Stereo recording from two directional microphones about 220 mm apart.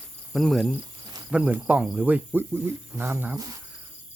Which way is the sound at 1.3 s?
5° right (ahead or behind).